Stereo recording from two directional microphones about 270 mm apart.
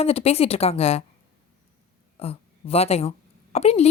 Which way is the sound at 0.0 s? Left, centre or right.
Left.